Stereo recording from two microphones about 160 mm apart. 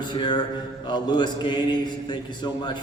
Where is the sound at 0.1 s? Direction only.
30° left (ahead or behind).